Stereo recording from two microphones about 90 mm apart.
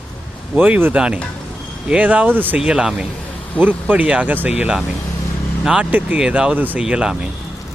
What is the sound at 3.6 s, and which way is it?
Speech, 20° right (ahead or behind).